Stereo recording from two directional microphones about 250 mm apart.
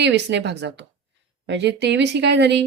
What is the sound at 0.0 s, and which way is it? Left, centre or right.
Speech, right.